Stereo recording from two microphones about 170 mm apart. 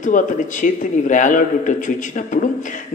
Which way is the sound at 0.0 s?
50° left (ahead or behind).